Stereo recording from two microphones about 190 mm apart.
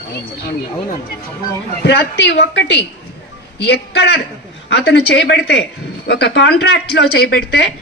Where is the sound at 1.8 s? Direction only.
60° left (ahead or behind).